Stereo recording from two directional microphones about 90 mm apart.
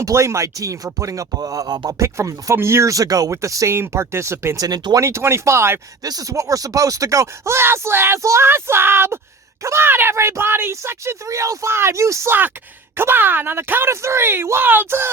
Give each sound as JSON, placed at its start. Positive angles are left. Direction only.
{"t": 0.0, "sound": "speech", "side_deg": -35}
{"t": 2.0, "sound": "speech", "side_deg": -35}
{"t": 4.6, "sound": "speech", "side_deg": -50}
{"t": 5.0, "sound": "speech", "side_deg": -30}
{"t": 6.0, "sound": "speech", "side_deg": -45}